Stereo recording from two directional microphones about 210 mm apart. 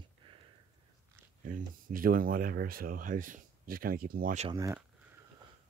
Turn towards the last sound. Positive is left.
turn(degrees=-15)  # may be behind; listen again after turning